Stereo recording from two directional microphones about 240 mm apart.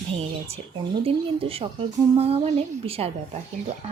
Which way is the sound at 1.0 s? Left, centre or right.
Right.